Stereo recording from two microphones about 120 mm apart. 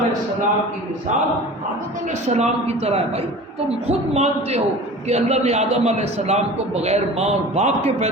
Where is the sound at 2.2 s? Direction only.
65° right (ahead or behind).